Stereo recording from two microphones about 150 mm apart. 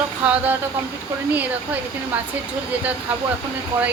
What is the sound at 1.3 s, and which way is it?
Speech, 10° right (ahead or behind).